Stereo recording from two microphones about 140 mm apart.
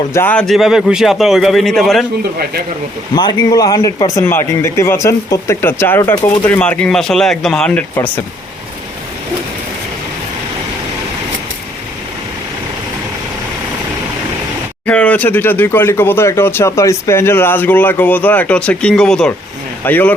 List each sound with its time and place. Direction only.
0.1 s speech: 15° left (ahead or behind)
0.4 s a man's voice: centre (ahead or behind)
3.2 s speech: 30° left (ahead or behind); by 8.2 s 15° left (ahead or behind)
14.8 s speech: 10° left (ahead or behind)